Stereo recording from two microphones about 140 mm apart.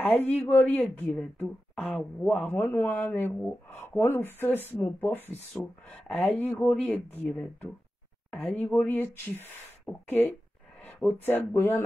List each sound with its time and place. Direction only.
0.0 s speech: 10° left (ahead or behind)
2.4 s speech: 15° left (ahead or behind)